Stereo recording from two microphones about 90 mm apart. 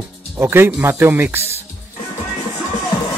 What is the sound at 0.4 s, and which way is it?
Speech, 25° right (ahead or behind).